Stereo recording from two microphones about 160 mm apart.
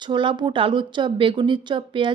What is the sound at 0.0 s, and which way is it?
A woman's voice, 30° right (ahead or behind).